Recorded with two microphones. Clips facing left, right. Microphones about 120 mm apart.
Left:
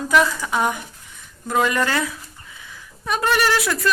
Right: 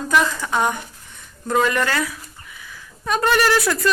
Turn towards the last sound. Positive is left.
turn(degrees=0)  # may be behind; listen again after turning